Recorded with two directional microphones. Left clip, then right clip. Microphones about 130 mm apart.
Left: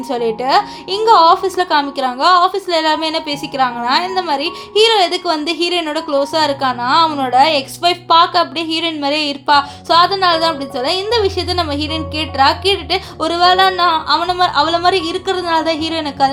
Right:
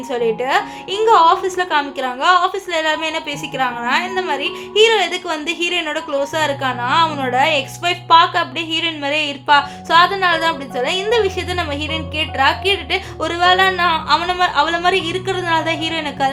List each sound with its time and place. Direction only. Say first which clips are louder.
0.1 s a woman's voice: left 3 dB; 30° left (ahead or behind); by 16.3 s 10° left (ahead or behind)